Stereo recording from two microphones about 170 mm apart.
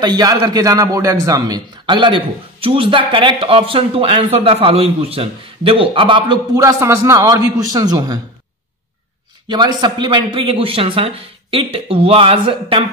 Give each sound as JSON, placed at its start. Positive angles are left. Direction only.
{"t": 0.0, "sound": "a man's voice", "side_deg": -25}
{"t": 9.5, "sound": "a man's voice", "side_deg": -25}